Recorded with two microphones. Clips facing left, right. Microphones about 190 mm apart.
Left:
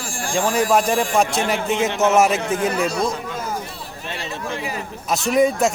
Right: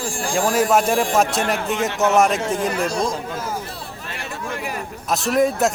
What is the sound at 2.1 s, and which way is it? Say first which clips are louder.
Speech: even; 5° left (ahead or behind).